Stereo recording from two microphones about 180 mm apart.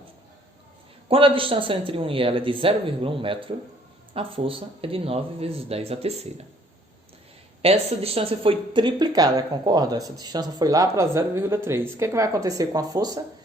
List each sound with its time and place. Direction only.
1.0 s speech: 30° right (ahead or behind)
7.6 s speech: 35° right (ahead or behind)